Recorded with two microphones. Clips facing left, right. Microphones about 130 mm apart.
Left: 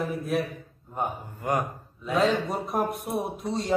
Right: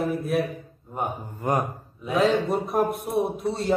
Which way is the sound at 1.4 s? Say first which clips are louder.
Right 2 dB; 35° right (ahead or behind).